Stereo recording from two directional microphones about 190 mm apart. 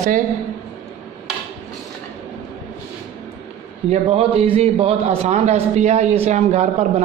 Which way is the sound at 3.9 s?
30° right (ahead or behind).